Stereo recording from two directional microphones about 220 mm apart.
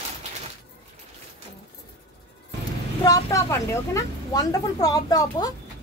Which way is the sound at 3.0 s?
15° left (ahead or behind).